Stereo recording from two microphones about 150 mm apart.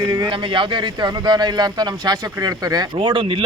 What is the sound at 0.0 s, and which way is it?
Speech, 30° right (ahead or behind).